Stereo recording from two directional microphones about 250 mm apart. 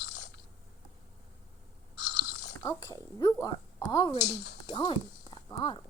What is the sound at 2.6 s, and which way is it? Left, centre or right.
Speech, centre.